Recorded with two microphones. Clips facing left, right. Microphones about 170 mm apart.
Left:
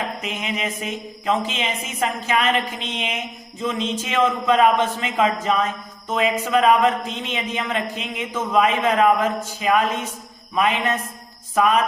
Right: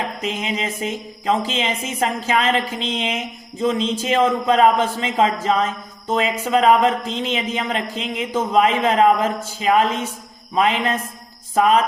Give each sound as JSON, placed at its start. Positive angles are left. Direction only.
{"t": 0.2, "sound": "speech", "side_deg": -30}